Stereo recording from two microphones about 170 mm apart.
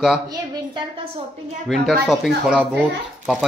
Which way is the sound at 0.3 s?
25° right (ahead or behind).